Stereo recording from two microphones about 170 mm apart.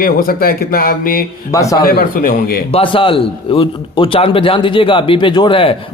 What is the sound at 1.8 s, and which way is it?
Speech, 60° left (ahead or behind).